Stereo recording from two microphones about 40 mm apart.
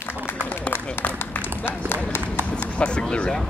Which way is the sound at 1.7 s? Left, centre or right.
Left.